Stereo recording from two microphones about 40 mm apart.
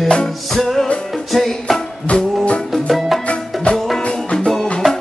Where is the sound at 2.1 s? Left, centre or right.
Left.